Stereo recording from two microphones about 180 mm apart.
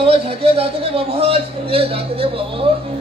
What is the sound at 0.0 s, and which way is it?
A man's voice, 30° right (ahead or behind).